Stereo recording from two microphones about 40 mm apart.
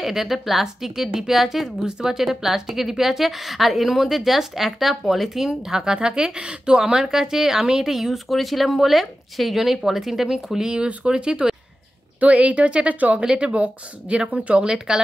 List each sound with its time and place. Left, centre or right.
0.0 s a woman's voice: centre
10.8 s speech: right
12.2 s speech: right